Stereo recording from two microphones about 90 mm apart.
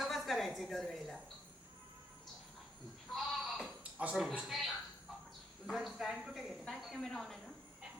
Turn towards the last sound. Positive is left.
turn(degrees=5)  # may be behind; listen again after turning